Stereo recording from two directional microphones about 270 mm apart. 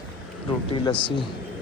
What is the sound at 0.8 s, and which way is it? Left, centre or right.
Speech, centre.